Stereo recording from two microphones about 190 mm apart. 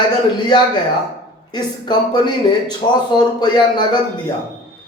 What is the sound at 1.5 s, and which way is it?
Speech, 25° left (ahead or behind).